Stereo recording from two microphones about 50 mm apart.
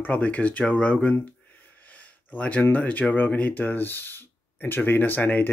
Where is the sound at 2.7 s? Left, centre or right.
Left.